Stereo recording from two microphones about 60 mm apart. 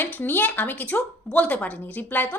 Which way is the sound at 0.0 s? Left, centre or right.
Left.